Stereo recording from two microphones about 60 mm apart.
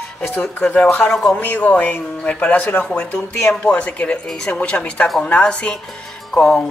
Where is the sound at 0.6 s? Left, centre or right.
Left.